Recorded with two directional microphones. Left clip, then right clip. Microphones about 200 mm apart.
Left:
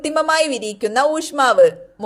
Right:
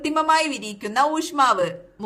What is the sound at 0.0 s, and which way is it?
A woman's voice, 30° left (ahead or behind).